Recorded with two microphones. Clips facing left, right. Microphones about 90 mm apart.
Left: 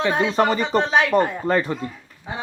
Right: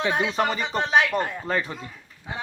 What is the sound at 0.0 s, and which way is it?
Speech, 5° right (ahead or behind).